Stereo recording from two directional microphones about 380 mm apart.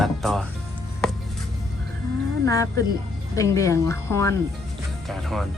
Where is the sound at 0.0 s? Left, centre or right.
Centre.